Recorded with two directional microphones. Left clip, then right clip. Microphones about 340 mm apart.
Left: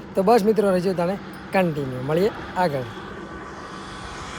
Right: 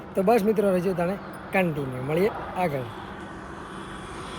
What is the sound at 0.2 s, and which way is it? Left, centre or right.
Speech, centre.